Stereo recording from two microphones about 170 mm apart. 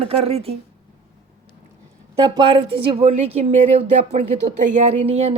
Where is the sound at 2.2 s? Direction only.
30° right (ahead or behind).